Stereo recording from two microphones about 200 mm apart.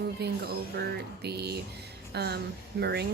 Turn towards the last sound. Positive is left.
turn(degrees=-55)  # may be behind; listen again after turning